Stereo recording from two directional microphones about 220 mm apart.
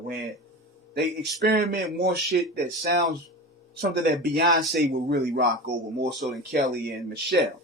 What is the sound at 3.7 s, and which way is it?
Speech, 45° right (ahead or behind).